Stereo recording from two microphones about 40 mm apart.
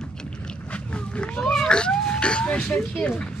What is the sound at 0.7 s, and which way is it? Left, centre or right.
Wild animals, left.